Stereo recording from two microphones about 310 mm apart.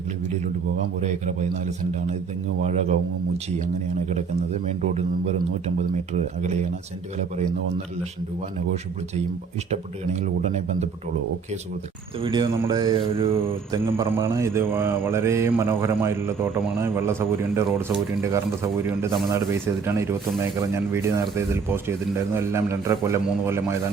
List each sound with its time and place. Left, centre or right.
2.6 s a man's voice: right
6.1 s a man's voice: right
9.6 s a man's voice: right
12.2 s speech: centre